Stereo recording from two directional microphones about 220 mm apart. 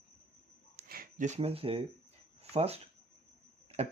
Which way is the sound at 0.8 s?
40° right (ahead or behind).